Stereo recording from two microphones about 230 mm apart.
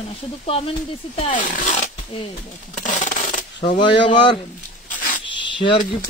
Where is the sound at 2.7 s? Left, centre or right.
Left.